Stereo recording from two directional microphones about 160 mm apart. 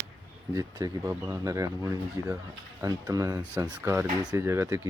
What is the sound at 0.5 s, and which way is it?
Speech, 20° right (ahead or behind).